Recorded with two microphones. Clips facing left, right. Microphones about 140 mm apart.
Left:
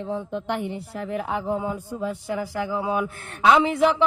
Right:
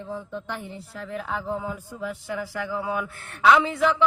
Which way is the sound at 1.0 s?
30° left (ahead or behind).